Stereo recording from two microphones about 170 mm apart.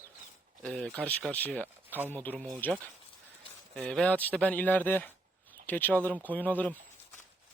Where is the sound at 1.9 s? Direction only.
10° right (ahead or behind).